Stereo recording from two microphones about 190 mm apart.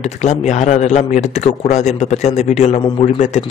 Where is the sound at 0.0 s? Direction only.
35° left (ahead or behind).